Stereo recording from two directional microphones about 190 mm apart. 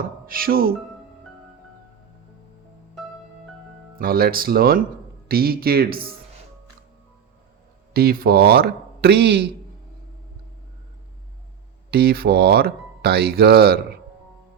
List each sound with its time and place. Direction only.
0.3 s speech: 50° right (ahead or behind)
3.9 s speech: 50° right (ahead or behind)
7.9 s speech: 50° right (ahead or behind)
11.9 s speech: 55° right (ahead or behind)